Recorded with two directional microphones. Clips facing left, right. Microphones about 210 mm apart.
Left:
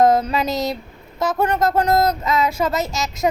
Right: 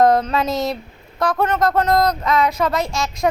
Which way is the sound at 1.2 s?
25° left (ahead or behind).